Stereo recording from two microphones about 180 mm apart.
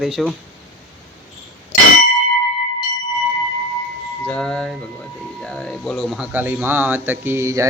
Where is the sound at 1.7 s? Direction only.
45° left (ahead or behind).